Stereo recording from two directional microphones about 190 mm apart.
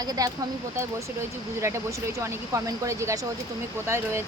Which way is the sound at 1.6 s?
15° right (ahead or behind).